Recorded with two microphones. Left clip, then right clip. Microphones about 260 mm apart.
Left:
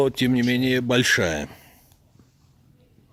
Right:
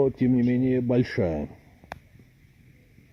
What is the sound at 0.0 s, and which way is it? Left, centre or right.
Speech, left.